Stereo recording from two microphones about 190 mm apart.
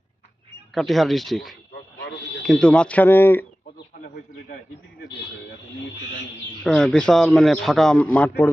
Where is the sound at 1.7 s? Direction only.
60° left (ahead or behind).